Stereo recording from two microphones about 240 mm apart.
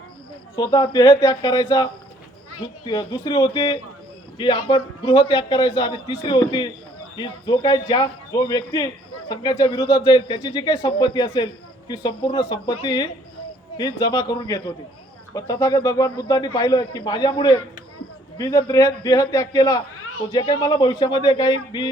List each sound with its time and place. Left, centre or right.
0.5 s a man's voice: centre